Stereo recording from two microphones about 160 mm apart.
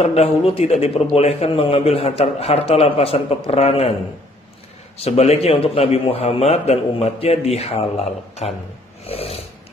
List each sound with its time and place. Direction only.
0.0 s a man's voice: 40° left (ahead or behind)
4.9 s a man's voice: 40° left (ahead or behind)